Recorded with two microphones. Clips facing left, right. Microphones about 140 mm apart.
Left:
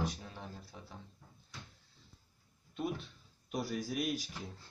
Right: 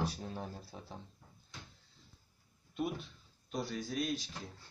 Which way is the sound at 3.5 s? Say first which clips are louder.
Left 1 dB; 10° left (ahead or behind).